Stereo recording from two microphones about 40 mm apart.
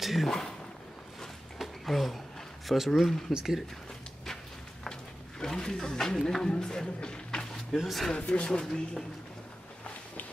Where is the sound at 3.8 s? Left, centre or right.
Centre.